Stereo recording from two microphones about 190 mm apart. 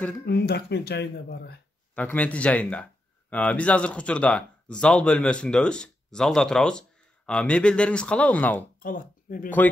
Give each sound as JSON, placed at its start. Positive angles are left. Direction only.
{"t": 0.2, "sound": "speech", "side_deg": 60}
{"t": 2.0, "sound": "speech", "side_deg": 10}
{"t": 8.8, "sound": "speech", "side_deg": 45}